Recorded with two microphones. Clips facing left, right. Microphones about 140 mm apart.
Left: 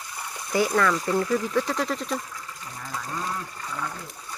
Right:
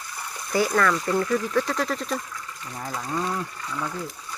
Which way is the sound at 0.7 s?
15° left (ahead or behind).